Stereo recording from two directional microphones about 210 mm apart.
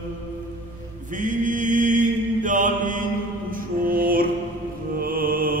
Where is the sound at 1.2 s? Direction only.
40° right (ahead or behind).